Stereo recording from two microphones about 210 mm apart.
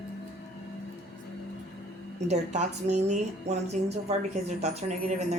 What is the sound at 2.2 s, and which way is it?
Speech, 35° right (ahead or behind).